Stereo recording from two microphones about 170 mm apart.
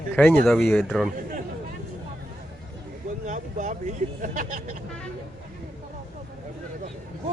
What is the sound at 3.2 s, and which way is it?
Speech, 50° right (ahead or behind).